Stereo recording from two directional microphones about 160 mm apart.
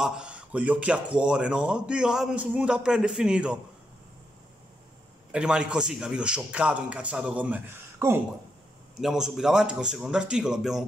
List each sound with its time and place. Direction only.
0.0 s speech: 5° right (ahead or behind)
5.3 s speech: 5° right (ahead or behind)
8.9 s speech: 5° right (ahead or behind)